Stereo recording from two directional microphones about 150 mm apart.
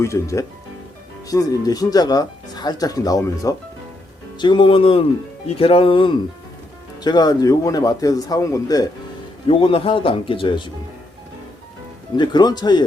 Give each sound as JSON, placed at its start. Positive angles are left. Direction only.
{"t": 0.0, "sound": "speech", "side_deg": 20}
{"t": 9.5, "sound": "speech", "side_deg": 35}
{"t": 12.1, "sound": "speech", "side_deg": 30}